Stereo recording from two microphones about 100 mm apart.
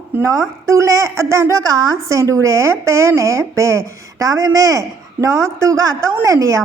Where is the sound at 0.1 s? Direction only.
30° right (ahead or behind).